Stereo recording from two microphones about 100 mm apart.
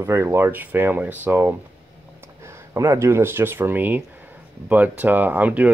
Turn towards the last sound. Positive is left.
turn(degrees=-15)  # may be behind; listen again after turning